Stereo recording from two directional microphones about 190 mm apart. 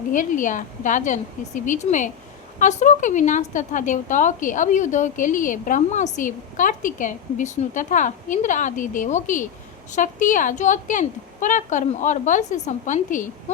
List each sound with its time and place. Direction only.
0.1 s a woman's voice: 45° left (ahead or behind)